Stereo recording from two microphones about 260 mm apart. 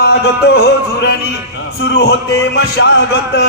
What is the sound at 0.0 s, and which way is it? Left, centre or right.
A man's voice, left.